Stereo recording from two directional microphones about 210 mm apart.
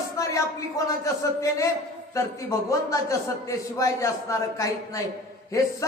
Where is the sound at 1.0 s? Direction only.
15° left (ahead or behind).